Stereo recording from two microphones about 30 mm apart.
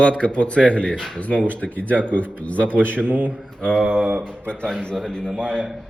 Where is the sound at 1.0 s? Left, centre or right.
Left.